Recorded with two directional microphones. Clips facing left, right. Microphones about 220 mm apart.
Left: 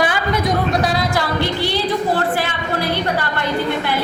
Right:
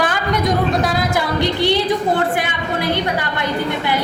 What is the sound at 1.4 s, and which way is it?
Speech, 20° right (ahead or behind).